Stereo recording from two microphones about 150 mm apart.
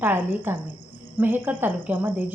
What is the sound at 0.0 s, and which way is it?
Speech, 15° right (ahead or behind).